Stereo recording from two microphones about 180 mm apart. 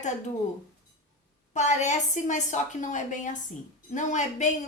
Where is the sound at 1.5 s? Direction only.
40° left (ahead or behind).